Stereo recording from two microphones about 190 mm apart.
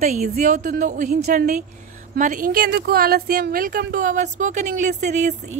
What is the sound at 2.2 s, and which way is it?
Speech, 45° right (ahead or behind).